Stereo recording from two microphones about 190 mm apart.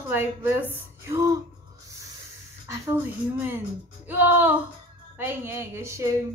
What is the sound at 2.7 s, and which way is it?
A woman's voice, 10° right (ahead or behind).